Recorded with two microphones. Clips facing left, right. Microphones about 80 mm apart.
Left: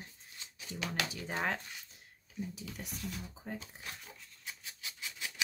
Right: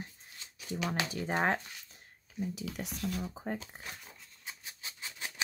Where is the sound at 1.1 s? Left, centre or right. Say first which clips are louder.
Right 8 dB; right.